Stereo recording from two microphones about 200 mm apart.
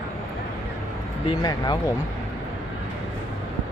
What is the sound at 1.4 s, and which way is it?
Speech, 20° left (ahead or behind).